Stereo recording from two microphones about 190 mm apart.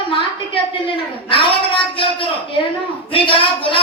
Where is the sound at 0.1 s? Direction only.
30° left (ahead or behind).